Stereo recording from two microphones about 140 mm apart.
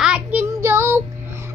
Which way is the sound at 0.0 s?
10° right (ahead or behind).